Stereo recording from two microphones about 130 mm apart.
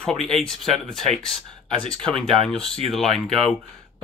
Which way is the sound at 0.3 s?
5° left (ahead or behind).